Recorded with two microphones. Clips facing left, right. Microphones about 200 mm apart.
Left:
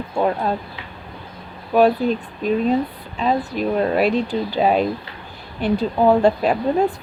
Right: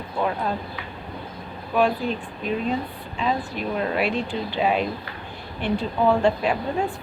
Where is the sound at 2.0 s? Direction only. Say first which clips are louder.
Left 6 dB; 40° left (ahead or behind).